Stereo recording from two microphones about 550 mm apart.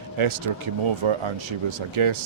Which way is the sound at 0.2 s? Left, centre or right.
Right.